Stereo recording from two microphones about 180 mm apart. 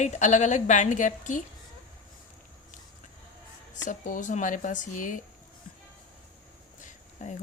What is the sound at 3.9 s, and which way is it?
Speech, 45° left (ahead or behind).